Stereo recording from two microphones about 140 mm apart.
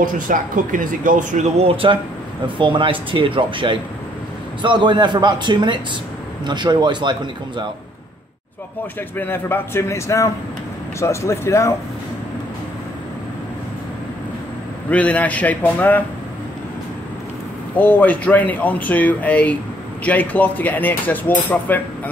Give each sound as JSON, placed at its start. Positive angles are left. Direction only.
{"t": 0.0, "sound": "speech", "side_deg": -75}
{"t": 9.1, "sound": "a man's voice", "side_deg": 15}
{"t": 14.9, "sound": "speech", "side_deg": 10}
{"t": 17.7, "sound": "speech", "side_deg": 15}